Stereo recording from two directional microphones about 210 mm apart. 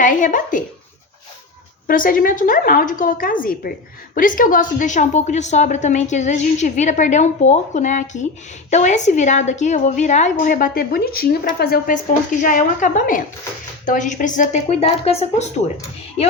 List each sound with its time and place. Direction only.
0.0 s a woman's voice: 40° left (ahead or behind)
1.9 s a woman's voice: 40° left (ahead or behind)